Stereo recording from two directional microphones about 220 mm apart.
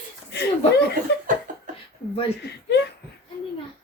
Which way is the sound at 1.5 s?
35° right (ahead or behind).